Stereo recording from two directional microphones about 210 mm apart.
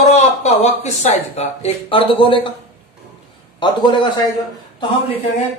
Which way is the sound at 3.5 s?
20° left (ahead or behind).